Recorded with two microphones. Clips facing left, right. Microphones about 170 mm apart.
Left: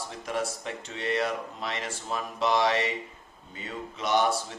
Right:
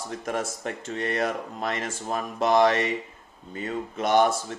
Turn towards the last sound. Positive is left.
turn(degrees=-50)  # may be behind; listen again after turning